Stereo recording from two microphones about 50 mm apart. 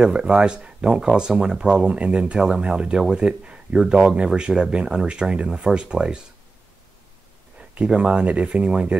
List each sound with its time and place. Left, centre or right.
0.0 s speech: centre
7.7 s speech: right